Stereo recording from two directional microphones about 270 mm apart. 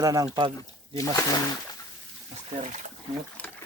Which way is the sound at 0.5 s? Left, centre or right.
Centre.